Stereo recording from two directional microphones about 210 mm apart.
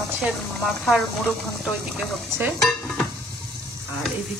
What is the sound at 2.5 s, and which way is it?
Dishes, 5° left (ahead or behind).